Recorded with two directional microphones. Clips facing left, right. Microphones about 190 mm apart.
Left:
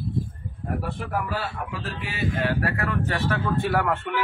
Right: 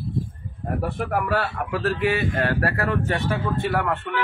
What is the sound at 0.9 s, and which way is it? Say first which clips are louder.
A man's voice: right 5 dB; 60° right (ahead or behind).